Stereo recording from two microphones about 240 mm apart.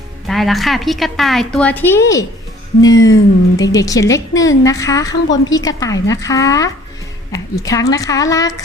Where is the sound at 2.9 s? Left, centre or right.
Left.